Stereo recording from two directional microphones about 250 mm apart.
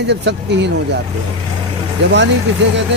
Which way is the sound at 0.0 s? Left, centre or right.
Right.